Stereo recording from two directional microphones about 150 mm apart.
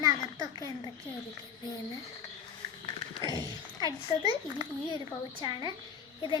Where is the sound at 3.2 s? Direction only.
30° left (ahead or behind).